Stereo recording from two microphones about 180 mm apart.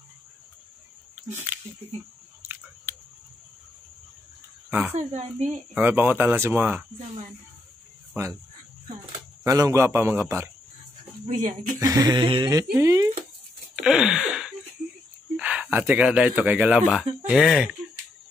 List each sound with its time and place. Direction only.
2.4 s chewing: 15° right (ahead or behind)
4.6 s speech: 10° right (ahead or behind)
4.9 s speech: 40° right (ahead or behind)
5.8 s a man's voice: 10° right (ahead or behind)
9.4 s a man's voice: 15° right (ahead or behind)
11.2 s speech: 40° right (ahead or behind)
11.8 s a man's voice: 20° right (ahead or behind)
13.7 s a sound: 5° right (ahead or behind)
15.9 s a man's voice: 5° right (ahead or behind)